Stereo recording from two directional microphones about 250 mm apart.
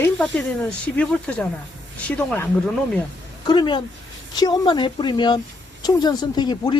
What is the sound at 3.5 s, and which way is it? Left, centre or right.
A woman's voice, centre.